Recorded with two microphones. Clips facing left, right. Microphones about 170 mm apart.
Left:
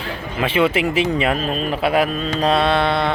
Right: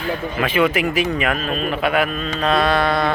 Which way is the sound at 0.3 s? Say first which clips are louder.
Left 1 dB; 30° left (ahead or behind).